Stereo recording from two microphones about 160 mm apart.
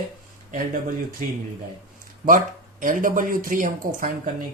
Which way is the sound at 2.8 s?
55° right (ahead or behind).